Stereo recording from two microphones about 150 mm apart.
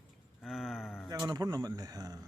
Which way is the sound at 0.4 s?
Centre (ahead or behind).